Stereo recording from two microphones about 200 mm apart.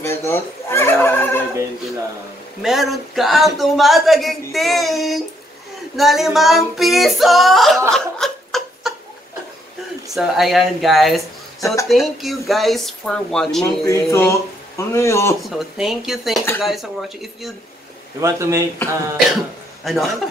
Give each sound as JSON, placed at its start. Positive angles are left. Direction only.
{"t": 0.0, "sound": "fowl", "side_deg": 10}
{"t": 2.6, "sound": "speech", "side_deg": 0}
{"t": 7.9, "sound": "a sound", "side_deg": 0}
{"t": 10.1, "sound": "speech", "side_deg": 0}
{"t": 11.6, "sound": "speech", "side_deg": 15}
{"t": 11.9, "sound": "speech", "side_deg": 0}
{"t": 13.8, "sound": "speech", "side_deg": 15}
{"t": 15.5, "sound": "speech", "side_deg": 0}
{"t": 18.2, "sound": "speech", "side_deg": -15}
{"t": 19.8, "sound": "speech", "side_deg": 0}